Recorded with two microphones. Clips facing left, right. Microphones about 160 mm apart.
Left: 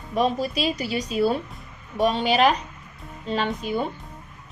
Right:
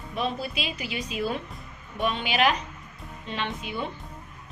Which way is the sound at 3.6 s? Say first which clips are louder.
Left 9 dB; 40° left (ahead or behind).